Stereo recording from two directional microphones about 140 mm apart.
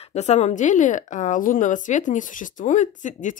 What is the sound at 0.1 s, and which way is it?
A woman's voice, 55° left (ahead or behind).